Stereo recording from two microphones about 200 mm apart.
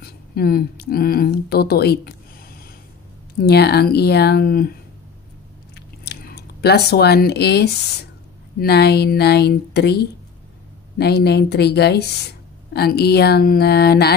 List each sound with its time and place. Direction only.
0.0 s a woman's voice: 50° left (ahead or behind)
6.0 s a woman's voice: 55° left (ahead or behind)